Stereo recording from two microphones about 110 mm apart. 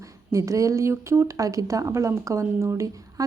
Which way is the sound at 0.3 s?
30° right (ahead or behind).